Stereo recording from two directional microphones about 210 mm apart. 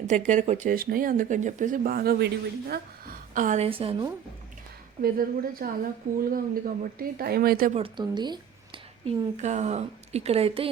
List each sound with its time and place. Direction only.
0.3 s speech: 35° right (ahead or behind)
5.0 s speech: 45° right (ahead or behind)
7.8 s speech: 20° right (ahead or behind)
9.0 s speech: 35° right (ahead or behind)